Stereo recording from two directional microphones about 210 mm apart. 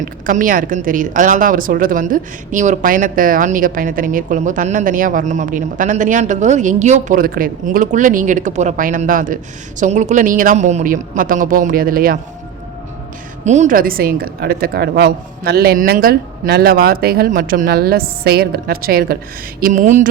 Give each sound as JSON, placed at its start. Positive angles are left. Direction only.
{"t": 0.0, "sound": "a woman's voice", "side_deg": -40}
{"t": 13.4, "sound": "a woman's voice", "side_deg": -35}